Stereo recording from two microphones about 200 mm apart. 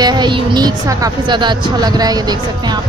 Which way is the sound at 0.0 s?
20° right (ahead or behind).